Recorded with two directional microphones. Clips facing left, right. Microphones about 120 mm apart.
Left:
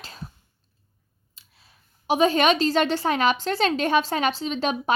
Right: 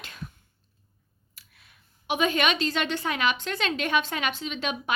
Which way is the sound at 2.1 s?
40° left (ahead or behind).